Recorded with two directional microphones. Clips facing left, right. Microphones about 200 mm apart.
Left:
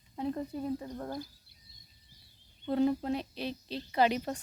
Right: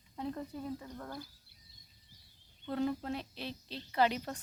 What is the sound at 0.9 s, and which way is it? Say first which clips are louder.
Speech: left 6 dB; 35° left (ahead or behind).